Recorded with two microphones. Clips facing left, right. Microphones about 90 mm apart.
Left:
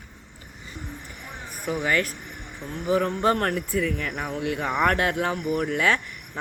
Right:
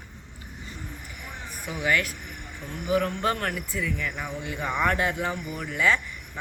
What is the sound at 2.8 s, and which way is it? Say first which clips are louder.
Speech: left 2 dB; 30° left (ahead or behind).